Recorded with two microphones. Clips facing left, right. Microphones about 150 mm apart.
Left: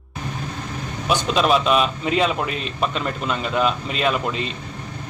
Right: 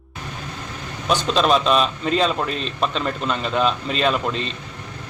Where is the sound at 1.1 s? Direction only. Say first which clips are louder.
Even; 10° left (ahead or behind).